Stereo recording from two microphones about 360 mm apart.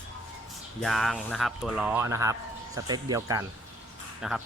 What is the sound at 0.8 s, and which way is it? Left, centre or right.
Speech, centre.